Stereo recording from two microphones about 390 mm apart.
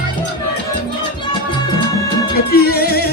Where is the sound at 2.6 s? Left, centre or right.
Left.